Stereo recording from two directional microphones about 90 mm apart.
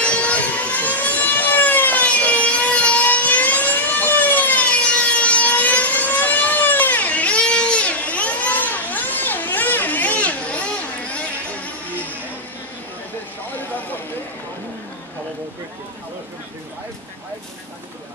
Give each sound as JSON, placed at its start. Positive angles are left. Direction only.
{"t": 0.0, "sound": "vehicle", "side_deg": 15}
{"t": 13.5, "sound": "vehicle", "side_deg": 20}